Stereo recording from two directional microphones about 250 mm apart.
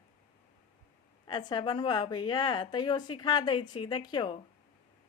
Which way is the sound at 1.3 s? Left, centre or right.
Centre.